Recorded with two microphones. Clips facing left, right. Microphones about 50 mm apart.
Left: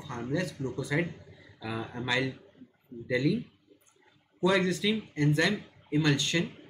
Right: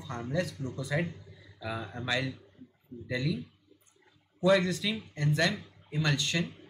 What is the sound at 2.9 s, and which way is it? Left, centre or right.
Speech, left.